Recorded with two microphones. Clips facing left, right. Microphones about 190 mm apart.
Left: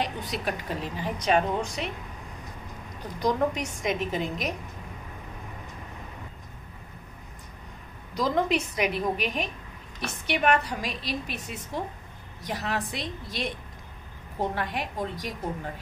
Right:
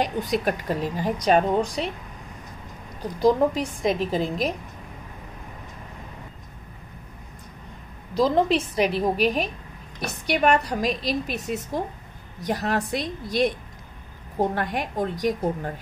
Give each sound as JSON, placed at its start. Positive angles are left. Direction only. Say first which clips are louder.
{"t": 0.0, "sound": "speech", "louder": "right 7 dB", "side_deg": -45}
{"t": 3.2, "sound": "a woman's voice", "louder": "right 6 dB", "side_deg": -30}
{"t": 8.1, "sound": "speech", "louder": "right 5 dB", "side_deg": -30}
{"t": 14.5, "sound": "a woman's voice", "louder": "right 4 dB", "side_deg": -45}